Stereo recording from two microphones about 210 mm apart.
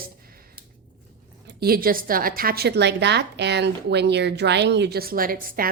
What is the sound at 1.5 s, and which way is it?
A woman's voice, 50° right (ahead or behind).